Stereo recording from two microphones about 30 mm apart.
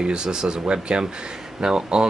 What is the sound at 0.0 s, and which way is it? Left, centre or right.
Speech, right.